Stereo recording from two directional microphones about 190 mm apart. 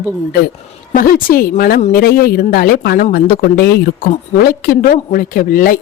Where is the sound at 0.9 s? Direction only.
45° left (ahead or behind).